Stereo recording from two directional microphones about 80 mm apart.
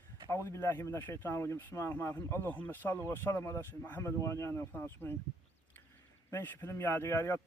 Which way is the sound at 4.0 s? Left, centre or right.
Left.